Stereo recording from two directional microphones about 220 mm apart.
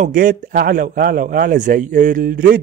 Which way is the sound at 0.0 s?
40° right (ahead or behind).